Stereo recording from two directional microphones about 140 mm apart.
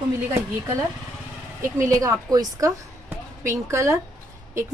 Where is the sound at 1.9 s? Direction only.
25° right (ahead or behind).